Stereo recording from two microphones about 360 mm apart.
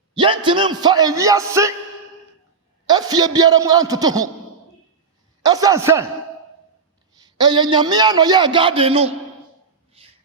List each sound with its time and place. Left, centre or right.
0.1 s a man's voice: centre
2.8 s a man's voice: centre
5.4 s a man's voice: centre
7.2 s a man's voice: centre
10.0 s gasp: centre